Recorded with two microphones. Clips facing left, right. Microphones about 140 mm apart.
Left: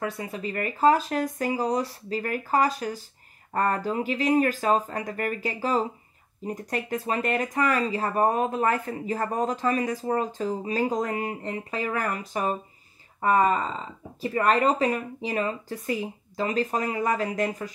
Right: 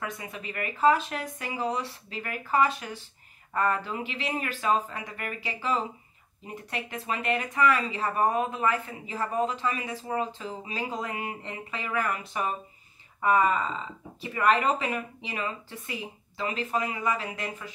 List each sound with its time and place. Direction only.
0.0 s speech: 35° left (ahead or behind)